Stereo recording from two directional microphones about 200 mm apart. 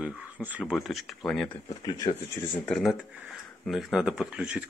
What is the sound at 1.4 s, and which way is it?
Speech, 20° left (ahead or behind).